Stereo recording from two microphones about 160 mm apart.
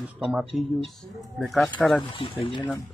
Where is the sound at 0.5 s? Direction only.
5° right (ahead or behind).